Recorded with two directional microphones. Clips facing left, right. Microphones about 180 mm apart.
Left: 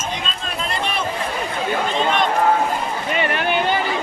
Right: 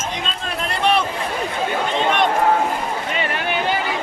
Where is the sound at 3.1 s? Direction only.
55° left (ahead or behind).